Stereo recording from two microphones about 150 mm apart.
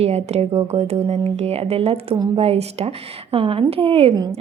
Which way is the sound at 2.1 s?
25° right (ahead or behind).